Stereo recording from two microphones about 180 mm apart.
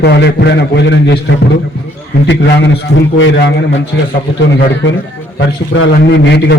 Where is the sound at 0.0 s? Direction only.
65° left (ahead or behind).